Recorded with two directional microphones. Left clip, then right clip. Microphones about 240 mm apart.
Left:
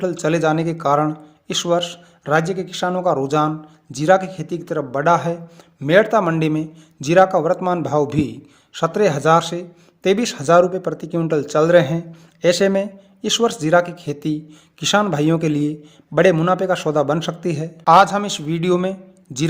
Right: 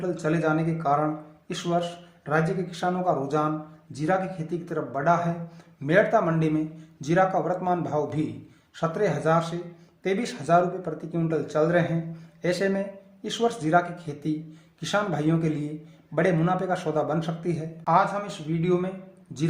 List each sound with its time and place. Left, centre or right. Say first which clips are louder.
0.0 s speech: left 8 dB; left